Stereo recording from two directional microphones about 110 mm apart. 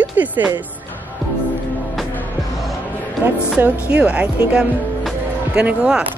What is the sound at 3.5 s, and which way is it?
Speech, 15° right (ahead or behind).